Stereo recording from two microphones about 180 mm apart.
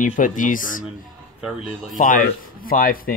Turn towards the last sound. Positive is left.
turn(degrees=50)  # may be behind; listen again after turning